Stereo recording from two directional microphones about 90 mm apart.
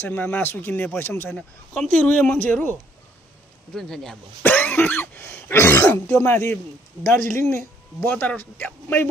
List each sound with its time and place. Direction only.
0.0 s speech: 20° left (ahead or behind)
1.3 s speech: 5° left (ahead or behind)
2.0 s speech: 15° left (ahead or behind)
3.7 s speech: 5° left (ahead or behind)
4.4 s cough: 20° left (ahead or behind)
5.2 s speech: 25° left (ahead or behind)
8.1 s speech: 20° left (ahead or behind)